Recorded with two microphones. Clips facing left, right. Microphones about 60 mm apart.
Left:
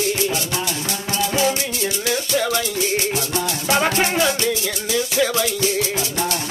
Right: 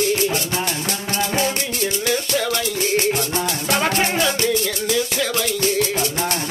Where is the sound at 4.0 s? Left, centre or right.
Centre.